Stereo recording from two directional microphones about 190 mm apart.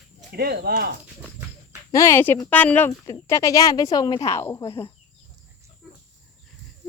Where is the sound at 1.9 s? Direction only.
15° left (ahead or behind).